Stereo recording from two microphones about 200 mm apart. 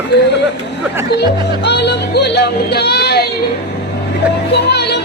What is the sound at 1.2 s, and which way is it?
Speech, 55° left (ahead or behind).